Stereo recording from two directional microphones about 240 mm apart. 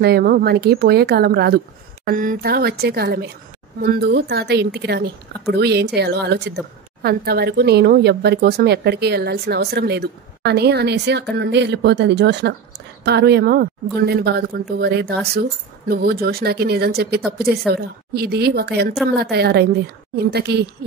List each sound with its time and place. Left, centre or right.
0.0 s a woman's voice: right